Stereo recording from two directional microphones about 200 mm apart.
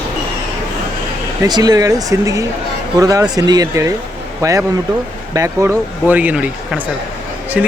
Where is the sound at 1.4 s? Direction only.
20° right (ahead or behind).